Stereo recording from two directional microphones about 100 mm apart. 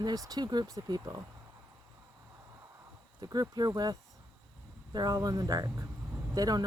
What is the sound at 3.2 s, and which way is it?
Speech, 40° right (ahead or behind).